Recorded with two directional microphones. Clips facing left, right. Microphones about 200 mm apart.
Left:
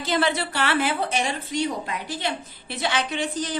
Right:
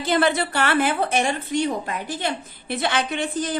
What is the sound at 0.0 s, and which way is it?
Speech, 55° right (ahead or behind).